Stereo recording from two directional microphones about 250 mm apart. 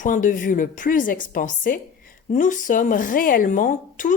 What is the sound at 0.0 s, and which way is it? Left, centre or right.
A woman's voice, left.